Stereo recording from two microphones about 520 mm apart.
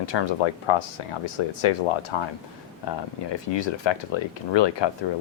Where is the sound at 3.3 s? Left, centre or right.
Left.